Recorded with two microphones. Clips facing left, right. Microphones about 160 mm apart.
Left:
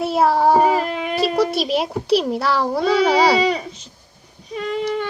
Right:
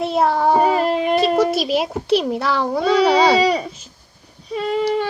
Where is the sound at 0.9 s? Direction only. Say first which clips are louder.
Right 6 dB; 35° right (ahead or behind).